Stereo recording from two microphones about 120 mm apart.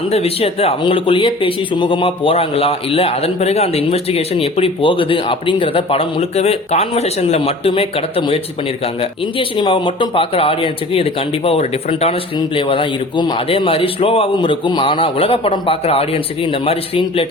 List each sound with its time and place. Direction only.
0.1 s a man's voice: 55° left (ahead or behind)
12.5 s a man's voice: 45° left (ahead or behind)